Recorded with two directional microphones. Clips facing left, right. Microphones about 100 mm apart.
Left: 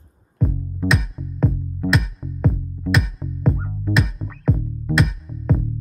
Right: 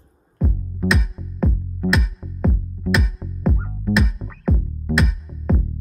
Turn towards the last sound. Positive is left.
turn(degrees=0)  # may be behind; listen again after turning